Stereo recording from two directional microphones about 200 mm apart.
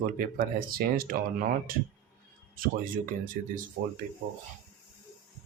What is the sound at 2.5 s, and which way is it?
Speech, 45° right (ahead or behind).